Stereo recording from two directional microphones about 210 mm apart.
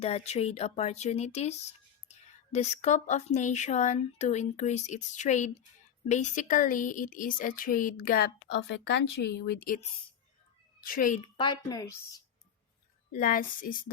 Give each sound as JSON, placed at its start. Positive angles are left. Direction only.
{"t": 0.0, "sound": "speech", "side_deg": 30}
{"t": 10.8, "sound": "speech", "side_deg": 40}
{"t": 11.3, "sound": "speech", "side_deg": 20}
{"t": 13.1, "sound": "speech", "side_deg": 40}